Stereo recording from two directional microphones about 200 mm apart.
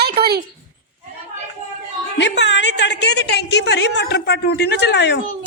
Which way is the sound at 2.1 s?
60° left (ahead or behind).